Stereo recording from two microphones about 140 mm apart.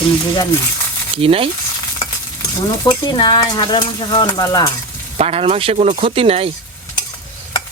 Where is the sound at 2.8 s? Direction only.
30° left (ahead or behind).